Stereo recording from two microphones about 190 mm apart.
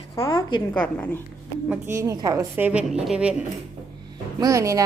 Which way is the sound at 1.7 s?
15° right (ahead or behind).